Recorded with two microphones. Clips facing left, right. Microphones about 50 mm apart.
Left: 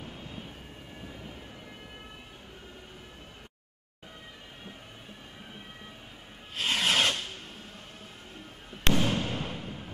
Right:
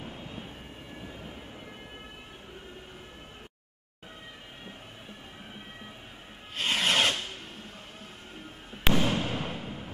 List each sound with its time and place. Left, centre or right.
0.0 s vehicle: centre
0.9 s vehicle: centre
6.5 s rub: centre
8.8 s fireworks: centre